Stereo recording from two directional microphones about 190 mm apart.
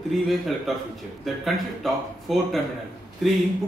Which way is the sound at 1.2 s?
Centre (ahead or behind).